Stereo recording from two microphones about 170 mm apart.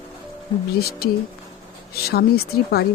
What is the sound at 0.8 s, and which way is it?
Speech, 65° left (ahead or behind).